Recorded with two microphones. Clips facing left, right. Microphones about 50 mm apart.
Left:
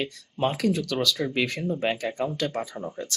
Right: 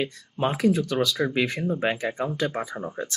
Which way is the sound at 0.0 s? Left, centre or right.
Right.